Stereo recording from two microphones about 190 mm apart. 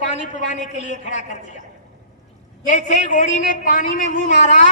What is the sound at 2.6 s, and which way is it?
A man's voice, 40° left (ahead or behind).